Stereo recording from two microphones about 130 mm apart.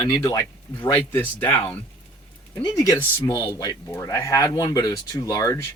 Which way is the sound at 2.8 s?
25° left (ahead or behind).